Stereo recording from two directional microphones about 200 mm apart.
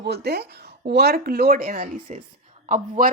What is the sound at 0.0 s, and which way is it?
Speech, 55° right (ahead or behind).